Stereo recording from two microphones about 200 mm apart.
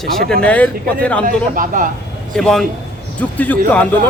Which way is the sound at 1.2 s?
45° right (ahead or behind).